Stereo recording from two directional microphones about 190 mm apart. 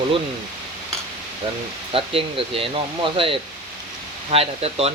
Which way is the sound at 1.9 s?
30° right (ahead or behind).